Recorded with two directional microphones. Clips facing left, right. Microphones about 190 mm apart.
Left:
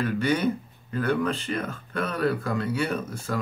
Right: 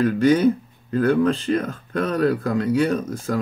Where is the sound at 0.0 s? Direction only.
35° right (ahead or behind).